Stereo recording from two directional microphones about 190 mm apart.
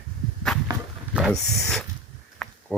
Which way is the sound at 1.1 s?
5° right (ahead or behind).